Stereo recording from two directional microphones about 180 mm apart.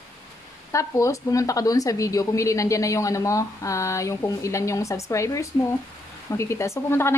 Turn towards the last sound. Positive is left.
turn(degrees=15)  # may be behind; listen again after turning